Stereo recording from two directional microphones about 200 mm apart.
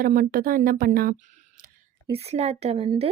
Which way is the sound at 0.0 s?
45° right (ahead or behind).